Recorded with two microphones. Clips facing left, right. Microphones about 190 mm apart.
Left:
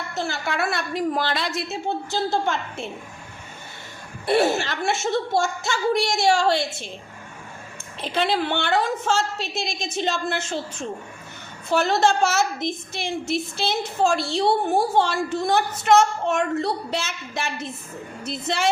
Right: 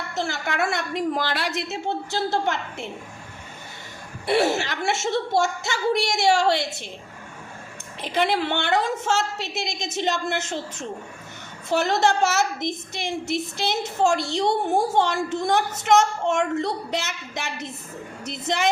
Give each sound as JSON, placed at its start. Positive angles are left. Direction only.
{"t": 0.2, "sound": "a woman's voice", "side_deg": -20}
{"t": 4.3, "sound": "a woman's voice", "side_deg": -20}
{"t": 8.0, "sound": "a woman's voice", "side_deg": -15}